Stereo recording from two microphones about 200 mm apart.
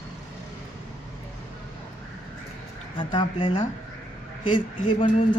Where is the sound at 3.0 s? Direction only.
25° left (ahead or behind).